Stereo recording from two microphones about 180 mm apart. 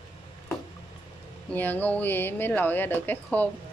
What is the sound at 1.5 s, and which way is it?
Speech, 10° left (ahead or behind).